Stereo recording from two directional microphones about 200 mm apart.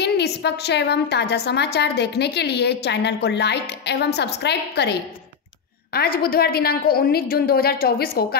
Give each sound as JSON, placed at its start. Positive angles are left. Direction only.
{"t": 0.0, "sound": "a woman's voice", "side_deg": 55}
{"t": 5.9, "sound": "a woman's voice", "side_deg": 50}